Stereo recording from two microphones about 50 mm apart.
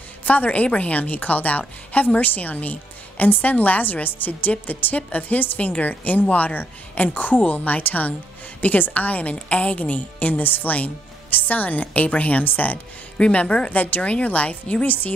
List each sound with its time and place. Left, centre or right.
0.2 s a woman's voice: left